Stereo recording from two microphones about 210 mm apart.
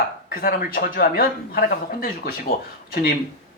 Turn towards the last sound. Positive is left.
turn(degrees=45)  # may be behind; listen again after turning